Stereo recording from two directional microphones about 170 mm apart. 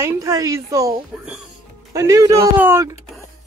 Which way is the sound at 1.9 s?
20° right (ahead or behind).